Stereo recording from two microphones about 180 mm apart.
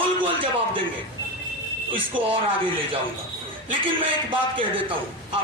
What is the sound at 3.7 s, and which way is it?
A man's voice, 30° right (ahead or behind).